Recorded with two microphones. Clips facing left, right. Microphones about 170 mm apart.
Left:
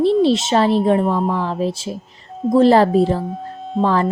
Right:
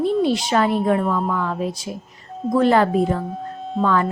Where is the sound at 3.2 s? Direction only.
Centre (ahead or behind).